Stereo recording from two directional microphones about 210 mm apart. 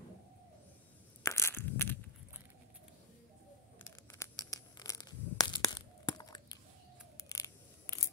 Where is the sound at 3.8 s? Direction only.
15° left (ahead or behind).